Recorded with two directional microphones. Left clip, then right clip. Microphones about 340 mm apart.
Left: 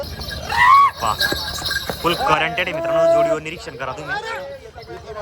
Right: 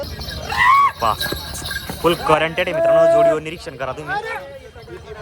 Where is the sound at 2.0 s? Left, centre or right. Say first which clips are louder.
Right 2 dB; centre.